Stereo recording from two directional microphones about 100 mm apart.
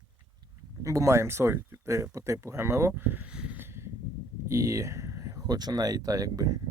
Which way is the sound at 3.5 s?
25° right (ahead or behind).